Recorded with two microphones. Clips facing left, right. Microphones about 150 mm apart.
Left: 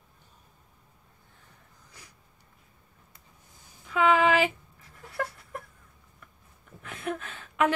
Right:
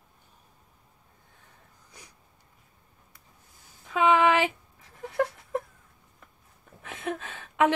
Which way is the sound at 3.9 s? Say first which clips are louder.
Right 1 dB; 20° right (ahead or behind).